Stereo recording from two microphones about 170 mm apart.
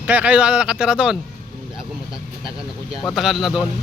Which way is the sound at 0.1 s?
5° right (ahead or behind).